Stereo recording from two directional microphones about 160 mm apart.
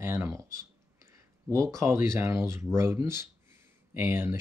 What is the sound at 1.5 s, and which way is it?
Speech, 15° right (ahead or behind).